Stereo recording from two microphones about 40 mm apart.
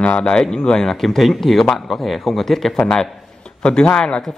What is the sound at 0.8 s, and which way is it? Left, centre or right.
Speech, centre.